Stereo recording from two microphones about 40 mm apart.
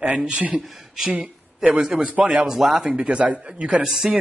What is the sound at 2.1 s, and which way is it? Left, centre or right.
Speech, right.